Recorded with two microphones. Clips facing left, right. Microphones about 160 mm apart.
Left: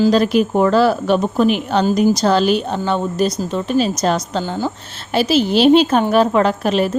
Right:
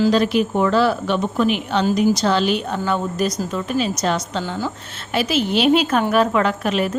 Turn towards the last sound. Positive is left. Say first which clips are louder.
# left 4 dB
turn(degrees=35)  # may be behind; listen again after turning